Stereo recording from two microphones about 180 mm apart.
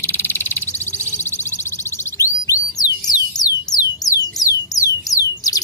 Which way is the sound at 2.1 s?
15° left (ahead or behind).